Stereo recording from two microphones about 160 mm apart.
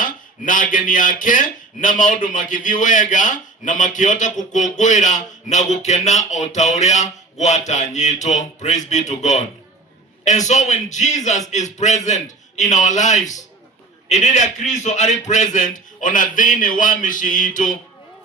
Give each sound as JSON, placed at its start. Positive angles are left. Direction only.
{"t": 0.0, "sound": "speech", "side_deg": 55}